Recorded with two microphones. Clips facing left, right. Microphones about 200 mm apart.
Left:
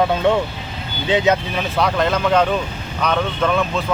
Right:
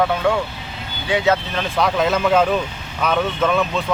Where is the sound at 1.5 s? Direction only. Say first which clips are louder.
Even; centre (ahead or behind).